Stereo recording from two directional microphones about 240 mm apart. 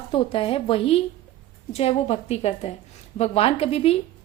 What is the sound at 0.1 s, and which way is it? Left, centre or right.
A woman's voice, left.